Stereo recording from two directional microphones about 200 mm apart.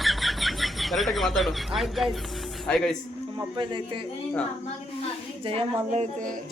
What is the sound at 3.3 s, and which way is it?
Speech, 25° right (ahead or behind).